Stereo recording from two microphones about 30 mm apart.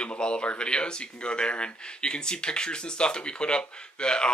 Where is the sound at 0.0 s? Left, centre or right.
Left.